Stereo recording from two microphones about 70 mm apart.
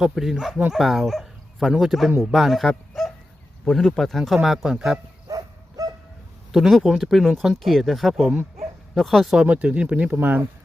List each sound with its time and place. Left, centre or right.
0.0 s speech: centre
5.3 s dog: right
6.5 s speech: centre
9.4 s speech: centre